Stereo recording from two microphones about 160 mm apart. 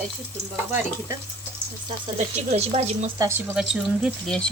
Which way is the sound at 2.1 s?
45° right (ahead or behind).